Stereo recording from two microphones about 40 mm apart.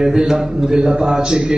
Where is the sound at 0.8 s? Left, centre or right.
Right.